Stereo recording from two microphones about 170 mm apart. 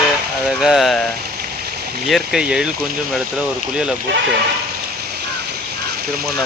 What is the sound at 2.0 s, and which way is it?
Speech, centre (ahead or behind).